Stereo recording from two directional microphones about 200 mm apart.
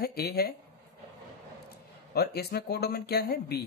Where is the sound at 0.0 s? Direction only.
50° left (ahead or behind).